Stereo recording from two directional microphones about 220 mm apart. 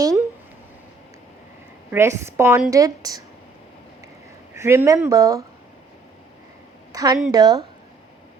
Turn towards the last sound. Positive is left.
turn(degrees=-20)  # may be behind; listen again after turning